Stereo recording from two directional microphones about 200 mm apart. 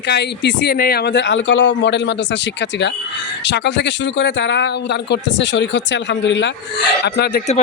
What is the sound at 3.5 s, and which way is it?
Speech, 60° left (ahead or behind).